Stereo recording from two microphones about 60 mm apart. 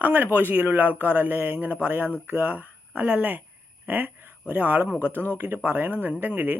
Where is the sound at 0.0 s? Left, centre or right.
Right.